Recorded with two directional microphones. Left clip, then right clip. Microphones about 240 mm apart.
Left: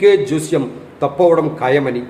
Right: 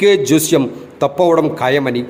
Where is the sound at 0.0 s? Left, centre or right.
Right.